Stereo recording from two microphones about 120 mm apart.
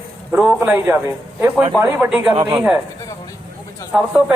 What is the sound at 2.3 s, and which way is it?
Speech, 45° right (ahead or behind).